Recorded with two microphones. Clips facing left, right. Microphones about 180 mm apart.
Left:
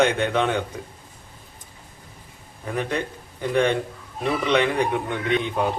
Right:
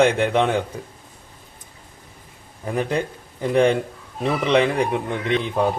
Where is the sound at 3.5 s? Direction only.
30° right (ahead or behind).